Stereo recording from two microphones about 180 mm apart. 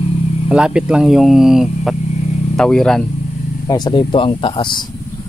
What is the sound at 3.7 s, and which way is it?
Speech, 25° left (ahead or behind).